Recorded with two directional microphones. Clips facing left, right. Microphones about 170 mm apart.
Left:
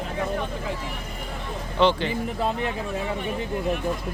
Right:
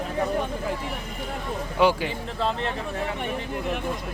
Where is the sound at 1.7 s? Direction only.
10° right (ahead or behind).